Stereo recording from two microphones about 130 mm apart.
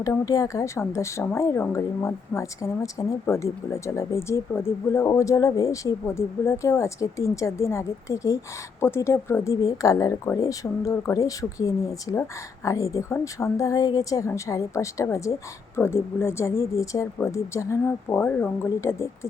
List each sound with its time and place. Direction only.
0.0 s a woman's voice: 25° left (ahead or behind)